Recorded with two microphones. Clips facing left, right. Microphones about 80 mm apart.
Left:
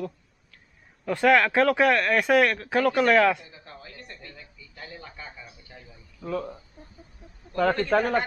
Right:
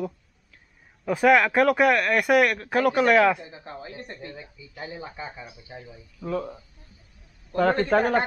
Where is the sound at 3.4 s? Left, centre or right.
Right; by 6.6 s centre.